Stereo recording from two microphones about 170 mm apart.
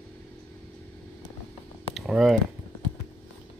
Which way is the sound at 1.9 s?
Centre (ahead or behind).